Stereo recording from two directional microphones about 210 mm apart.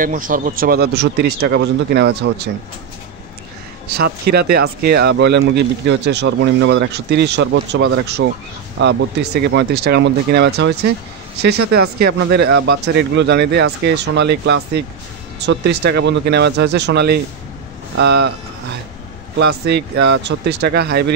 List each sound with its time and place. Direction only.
0.0 s speech: 40° right (ahead or behind)
3.9 s speech: 50° right (ahead or behind)
12.0 s speech: 55° right (ahead or behind)
19.3 s speech: 55° right (ahead or behind)